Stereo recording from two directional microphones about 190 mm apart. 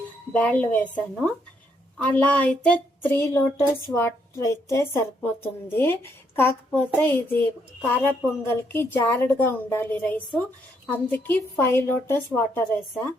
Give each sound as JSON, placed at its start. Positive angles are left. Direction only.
{"t": 0.3, "sound": "a woman's voice", "side_deg": 5}